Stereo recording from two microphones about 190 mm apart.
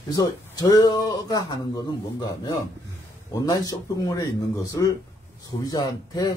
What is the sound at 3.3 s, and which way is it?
Speech, 20° left (ahead or behind).